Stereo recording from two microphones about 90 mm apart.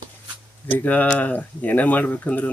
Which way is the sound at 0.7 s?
20° left (ahead or behind).